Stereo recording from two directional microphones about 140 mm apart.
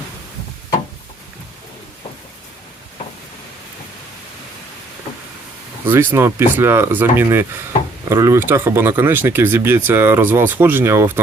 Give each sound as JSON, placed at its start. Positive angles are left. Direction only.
{"t": 5.8, "sound": "speech", "side_deg": -15}